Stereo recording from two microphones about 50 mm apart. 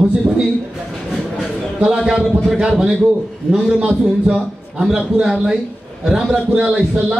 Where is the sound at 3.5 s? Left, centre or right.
Centre.